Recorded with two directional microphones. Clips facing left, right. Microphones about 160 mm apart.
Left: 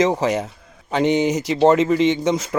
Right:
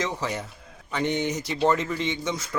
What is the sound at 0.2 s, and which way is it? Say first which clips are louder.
Speech: left 10 dB; 90° left.